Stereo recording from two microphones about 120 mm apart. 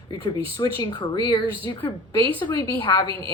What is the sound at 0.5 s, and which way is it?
Speech, 35° left (ahead or behind).